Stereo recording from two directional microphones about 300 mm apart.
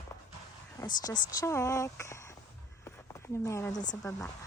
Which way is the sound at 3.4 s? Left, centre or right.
Centre.